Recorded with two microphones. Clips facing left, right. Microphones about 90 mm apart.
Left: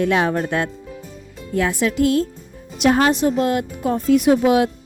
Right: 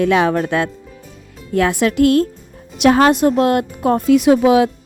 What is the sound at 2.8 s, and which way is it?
Speech, 80° right.